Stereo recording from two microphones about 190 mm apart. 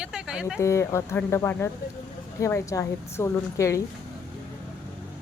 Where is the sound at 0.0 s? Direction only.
5° right (ahead or behind).